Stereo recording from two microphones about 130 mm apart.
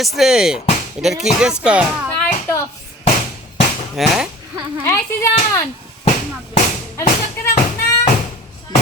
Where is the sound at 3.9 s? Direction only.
Centre (ahead or behind).